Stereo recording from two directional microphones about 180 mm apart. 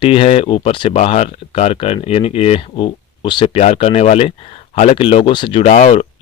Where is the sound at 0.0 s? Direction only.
30° left (ahead or behind).